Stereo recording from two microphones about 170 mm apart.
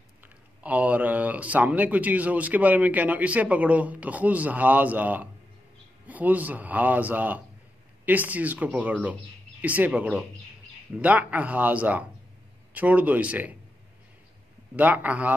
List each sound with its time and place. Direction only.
0.2 s speech: 10° right (ahead or behind)
14.8 s speech: 10° right (ahead or behind)